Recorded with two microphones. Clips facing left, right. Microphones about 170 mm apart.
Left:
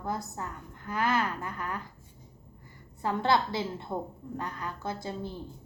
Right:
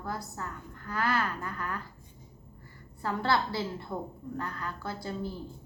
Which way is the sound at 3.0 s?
20° left (ahead or behind).